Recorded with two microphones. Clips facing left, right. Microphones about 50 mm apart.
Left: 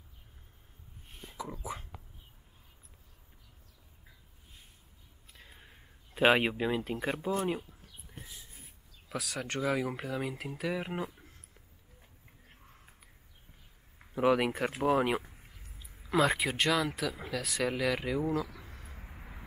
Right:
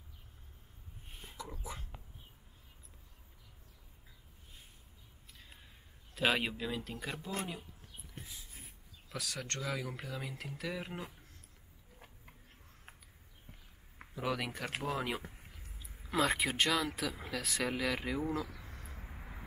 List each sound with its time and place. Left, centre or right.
1.3 s whispering: centre
5.4 s a sound: left
6.1 s speech: left
9.1 s speech: centre
14.1 s speech: left
15.3 s speech: centre